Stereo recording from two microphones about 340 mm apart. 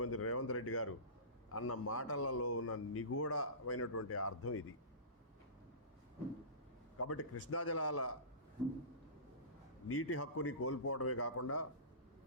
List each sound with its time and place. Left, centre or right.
0.0 s a man's voice: left
7.0 s a man's voice: left
9.9 s a man's voice: left